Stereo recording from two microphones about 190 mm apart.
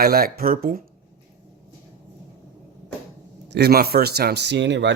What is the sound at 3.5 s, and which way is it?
Speech, 60° right (ahead or behind).